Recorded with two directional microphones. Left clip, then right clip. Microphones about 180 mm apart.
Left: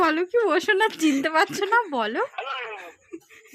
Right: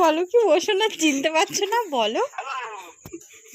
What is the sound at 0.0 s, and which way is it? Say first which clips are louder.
Speech: right 3 dB; 20° left (ahead or behind).